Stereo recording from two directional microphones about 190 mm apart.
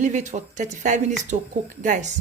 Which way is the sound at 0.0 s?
40° right (ahead or behind).